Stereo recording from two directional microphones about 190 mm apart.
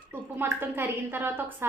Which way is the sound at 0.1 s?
10° right (ahead or behind).